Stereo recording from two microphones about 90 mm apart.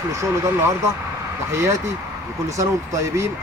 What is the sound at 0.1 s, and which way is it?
Speech, 30° right (ahead or behind).